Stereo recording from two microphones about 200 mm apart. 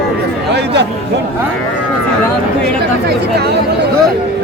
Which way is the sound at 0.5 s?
60° right (ahead or behind).